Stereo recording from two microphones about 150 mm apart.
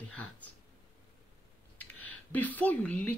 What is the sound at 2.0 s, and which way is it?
Speech, 10° left (ahead or behind).